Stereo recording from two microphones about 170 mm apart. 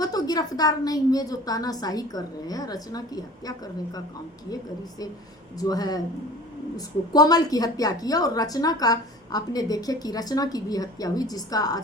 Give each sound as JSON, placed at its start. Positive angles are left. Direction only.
{"t": 0.0, "sound": "a woman's voice", "side_deg": 20}
{"t": 5.5, "sound": "a woman's voice", "side_deg": 20}